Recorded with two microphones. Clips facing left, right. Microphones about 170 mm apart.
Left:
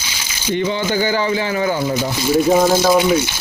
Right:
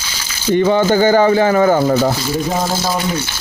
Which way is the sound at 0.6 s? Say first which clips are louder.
Right 7 dB; 45° right (ahead or behind).